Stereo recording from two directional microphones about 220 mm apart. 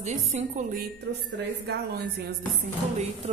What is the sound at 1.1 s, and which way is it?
Speech, 55° right (ahead or behind).